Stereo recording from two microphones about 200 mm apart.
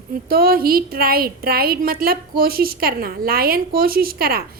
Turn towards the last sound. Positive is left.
turn(degrees=-50)  # may be behind; listen again after turning